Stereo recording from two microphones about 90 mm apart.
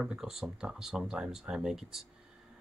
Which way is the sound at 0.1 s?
5° right (ahead or behind).